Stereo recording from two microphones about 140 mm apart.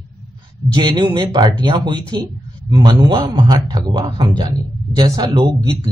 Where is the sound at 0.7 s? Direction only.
35° right (ahead or behind).